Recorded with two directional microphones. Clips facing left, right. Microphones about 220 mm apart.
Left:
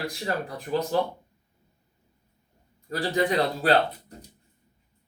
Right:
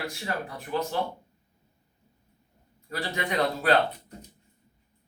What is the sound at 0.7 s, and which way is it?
Speech, 35° left (ahead or behind).